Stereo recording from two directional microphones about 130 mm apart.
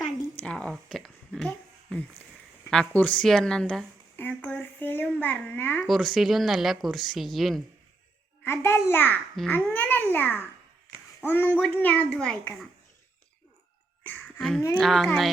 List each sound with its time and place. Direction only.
0.4 s speech: 10° left (ahead or behind)
4.3 s babbling: 15° left (ahead or behind)
5.9 s speech: centre (ahead or behind)
8.4 s a child's voice: 20° left (ahead or behind)
14.3 s speech: centre (ahead or behind)